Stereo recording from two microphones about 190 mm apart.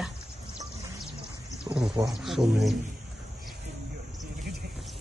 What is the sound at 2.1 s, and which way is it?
Speech, centre (ahead or behind).